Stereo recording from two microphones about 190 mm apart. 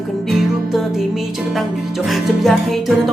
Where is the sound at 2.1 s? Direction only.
Centre (ahead or behind).